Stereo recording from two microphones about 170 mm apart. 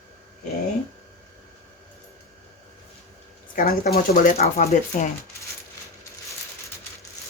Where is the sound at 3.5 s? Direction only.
60° left (ahead or behind).